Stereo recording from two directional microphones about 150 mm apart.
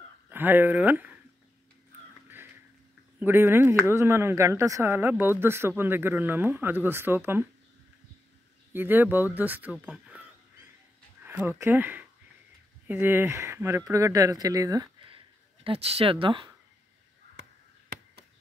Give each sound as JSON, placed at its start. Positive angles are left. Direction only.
{"t": 0.3, "sound": "speech", "side_deg": -15}
{"t": 3.2, "sound": "a woman's voice", "side_deg": -15}
{"t": 8.7, "sound": "a woman's voice", "side_deg": -15}
{"t": 11.2, "sound": "speech", "side_deg": -15}
{"t": 15.0, "sound": "a sound", "side_deg": -35}